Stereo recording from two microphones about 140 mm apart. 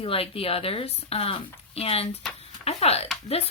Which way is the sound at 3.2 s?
45° left (ahead or behind).